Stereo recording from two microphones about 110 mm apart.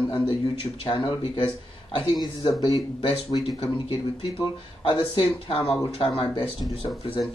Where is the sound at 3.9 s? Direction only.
55° left (ahead or behind).